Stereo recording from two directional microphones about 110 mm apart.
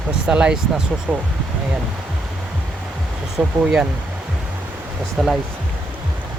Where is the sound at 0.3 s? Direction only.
10° right (ahead or behind).